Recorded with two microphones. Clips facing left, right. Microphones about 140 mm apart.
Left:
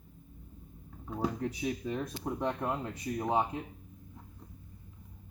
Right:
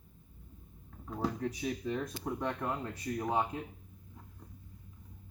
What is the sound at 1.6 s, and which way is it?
Speech, 15° left (ahead or behind).